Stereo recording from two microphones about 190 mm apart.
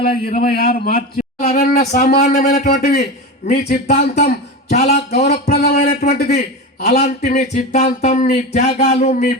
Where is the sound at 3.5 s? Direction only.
55° left (ahead or behind).